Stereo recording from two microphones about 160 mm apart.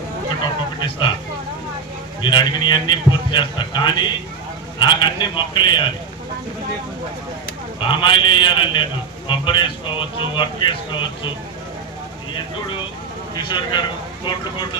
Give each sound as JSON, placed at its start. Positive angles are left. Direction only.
{"t": 0.8, "sound": "a sound", "side_deg": 30}
{"t": 2.2, "sound": "a man's voice", "side_deg": 30}
{"t": 7.8, "sound": "a man's voice", "side_deg": 30}
{"t": 13.3, "sound": "a man's voice", "side_deg": 30}